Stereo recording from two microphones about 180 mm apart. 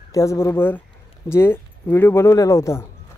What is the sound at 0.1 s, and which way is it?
Speech, 15° left (ahead or behind).